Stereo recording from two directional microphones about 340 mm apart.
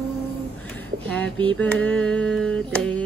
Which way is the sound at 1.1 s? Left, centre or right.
Centre.